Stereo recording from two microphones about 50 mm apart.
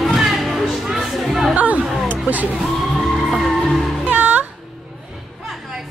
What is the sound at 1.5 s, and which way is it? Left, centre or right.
Chatter, right.